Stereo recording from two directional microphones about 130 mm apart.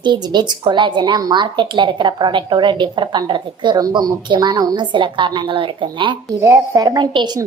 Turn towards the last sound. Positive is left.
turn(degrees=-35)  # may be behind; listen again after turning